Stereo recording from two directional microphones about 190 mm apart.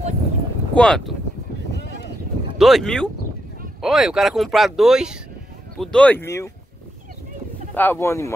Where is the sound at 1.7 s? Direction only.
60° left (ahead or behind).